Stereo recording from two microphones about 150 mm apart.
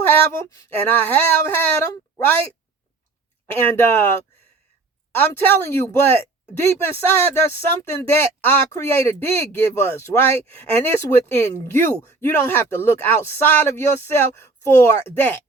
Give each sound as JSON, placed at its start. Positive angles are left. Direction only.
{"t": 0.0, "sound": "a sound", "side_deg": 15}
{"t": 0.9, "sound": "speech", "side_deg": 10}
{"t": 3.4, "sound": "speech", "side_deg": 15}